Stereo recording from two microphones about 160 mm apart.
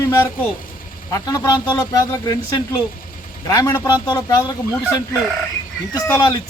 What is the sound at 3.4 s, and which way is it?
Speech, 20° left (ahead or behind).